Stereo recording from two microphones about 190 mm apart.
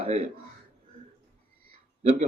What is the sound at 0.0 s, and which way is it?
Speech, 30° right (ahead or behind).